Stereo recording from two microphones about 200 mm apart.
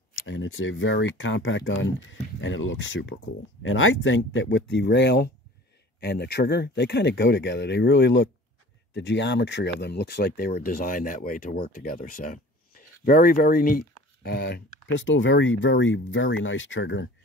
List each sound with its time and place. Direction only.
0.3 s speech: 75° left (ahead or behind)
3.6 s speech: 80° left; by 17.1 s 65° left (ahead or behind)